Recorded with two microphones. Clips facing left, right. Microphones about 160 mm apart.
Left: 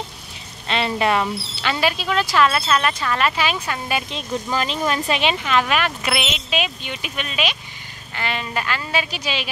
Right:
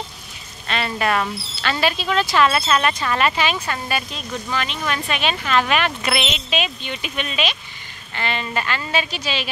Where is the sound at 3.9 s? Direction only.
25° left (ahead or behind).